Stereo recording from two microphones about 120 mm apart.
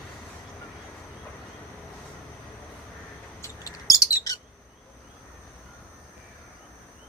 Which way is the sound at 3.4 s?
30° left (ahead or behind).